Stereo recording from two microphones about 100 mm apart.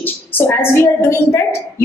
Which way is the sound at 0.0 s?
20° left (ahead or behind).